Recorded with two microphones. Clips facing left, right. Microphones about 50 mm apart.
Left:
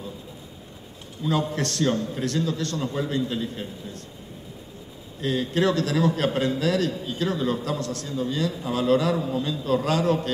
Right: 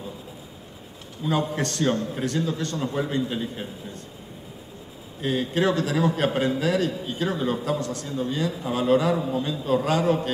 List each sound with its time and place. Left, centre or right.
1.2 s a man's voice: centre
2.0 s a man's voice: centre
2.2 s a man's voice: centre
5.2 s a man's voice: centre